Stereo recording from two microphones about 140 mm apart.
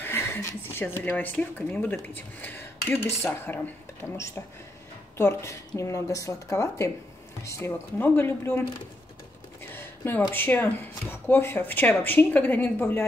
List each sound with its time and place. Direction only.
0.0 s speech: 15° left (ahead or behind)
5.1 s speech: 20° left (ahead or behind)
9.6 s a sound: 15° left (ahead or behind)
10.3 s speech: 15° left (ahead or behind)